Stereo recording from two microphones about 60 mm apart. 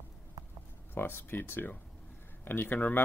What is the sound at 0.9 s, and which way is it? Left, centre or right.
Speech, left.